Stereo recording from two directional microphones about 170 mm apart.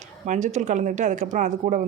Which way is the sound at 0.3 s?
45° right (ahead or behind).